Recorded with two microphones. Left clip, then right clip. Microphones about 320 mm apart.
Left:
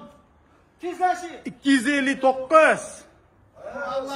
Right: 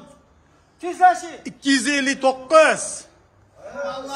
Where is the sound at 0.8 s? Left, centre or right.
Right.